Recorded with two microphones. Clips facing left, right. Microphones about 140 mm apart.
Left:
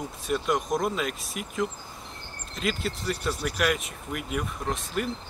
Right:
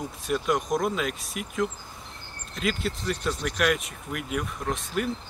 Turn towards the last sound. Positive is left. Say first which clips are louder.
# right 1 dB
turn(degrees=0)  # may be behind; listen again after turning